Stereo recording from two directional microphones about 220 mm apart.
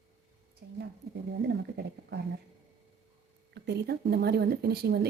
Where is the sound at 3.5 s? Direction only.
50° right (ahead or behind).